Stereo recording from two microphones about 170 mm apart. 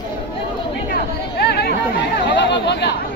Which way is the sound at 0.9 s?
70° left (ahead or behind).